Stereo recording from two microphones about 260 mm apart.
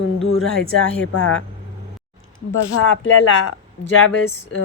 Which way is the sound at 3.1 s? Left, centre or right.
Left.